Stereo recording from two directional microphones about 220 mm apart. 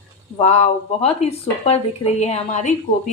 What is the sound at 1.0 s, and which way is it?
A woman's voice, 30° left (ahead or behind).